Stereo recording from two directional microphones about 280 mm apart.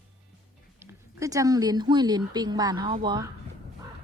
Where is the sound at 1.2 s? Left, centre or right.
Centre.